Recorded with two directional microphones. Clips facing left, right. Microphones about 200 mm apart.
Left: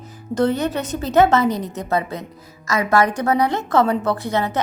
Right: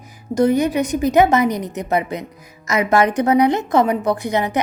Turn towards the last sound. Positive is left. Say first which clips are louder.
# right 2 dB
turn(degrees=-15)  # may be behind; listen again after turning